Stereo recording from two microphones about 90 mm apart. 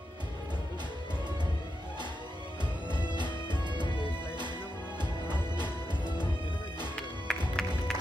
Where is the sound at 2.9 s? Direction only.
55° right (ahead or behind).